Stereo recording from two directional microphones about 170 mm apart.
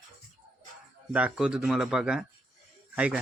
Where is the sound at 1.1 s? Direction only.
5° right (ahead or behind).